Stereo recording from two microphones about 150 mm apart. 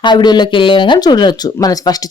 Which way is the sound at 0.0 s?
30° left (ahead or behind).